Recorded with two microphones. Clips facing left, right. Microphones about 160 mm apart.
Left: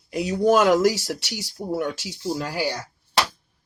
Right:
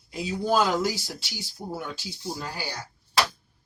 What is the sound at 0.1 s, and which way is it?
Speech, 75° left (ahead or behind).